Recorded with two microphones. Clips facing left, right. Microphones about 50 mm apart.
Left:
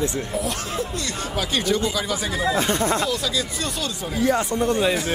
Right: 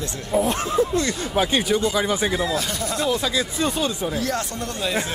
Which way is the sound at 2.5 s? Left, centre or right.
Left.